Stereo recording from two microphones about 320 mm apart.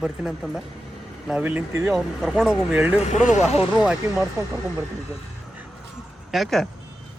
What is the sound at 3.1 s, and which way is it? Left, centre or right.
Speech, left.